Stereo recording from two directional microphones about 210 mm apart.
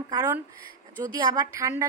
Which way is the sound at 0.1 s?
15° right (ahead or behind).